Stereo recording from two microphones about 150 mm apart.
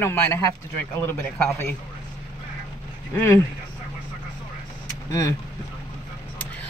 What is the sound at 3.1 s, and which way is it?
Speech, 15° left (ahead or behind).